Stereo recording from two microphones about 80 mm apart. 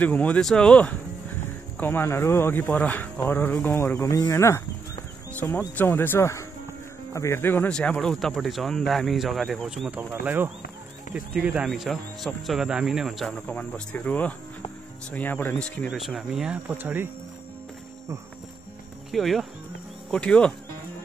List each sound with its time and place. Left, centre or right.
0.0 s speech: centre
0.4 s speech: centre
1.8 s speech: left
4.1 s speech: left
5.3 s speech: left
7.7 s speech: centre
10.2 s speech: right
11.1 s speech: centre
11.7 s speech: centre
13.3 s speech: centre
15.9 s speech: centre
16.6 s speech: right
19.1 s speech: centre
20.1 s speech: centre